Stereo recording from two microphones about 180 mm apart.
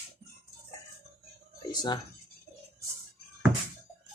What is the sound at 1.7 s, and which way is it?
Speech, 25° left (ahead or behind).